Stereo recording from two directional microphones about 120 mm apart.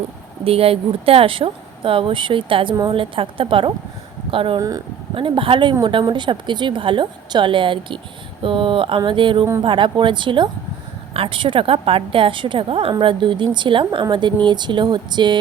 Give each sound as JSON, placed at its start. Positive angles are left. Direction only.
{"t": 0.4, "sound": "a woman's voice", "side_deg": -55}